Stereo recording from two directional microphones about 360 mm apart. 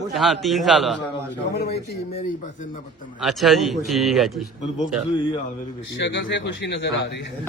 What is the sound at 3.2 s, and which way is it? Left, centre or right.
A man's voice, centre.